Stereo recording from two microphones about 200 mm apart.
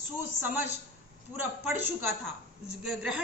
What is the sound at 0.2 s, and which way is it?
A woman's voice, 10° right (ahead or behind).